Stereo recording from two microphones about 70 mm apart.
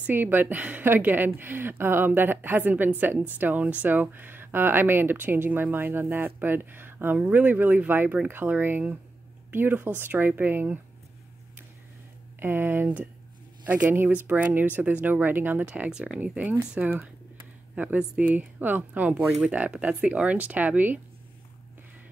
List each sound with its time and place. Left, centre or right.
0.0 s speech: right
12.4 s speech: right
15.6 s speech: centre
16.2 s speech: right